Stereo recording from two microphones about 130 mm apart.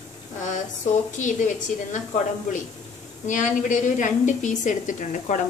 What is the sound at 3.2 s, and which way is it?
A woman's voice, 75° left (ahead or behind).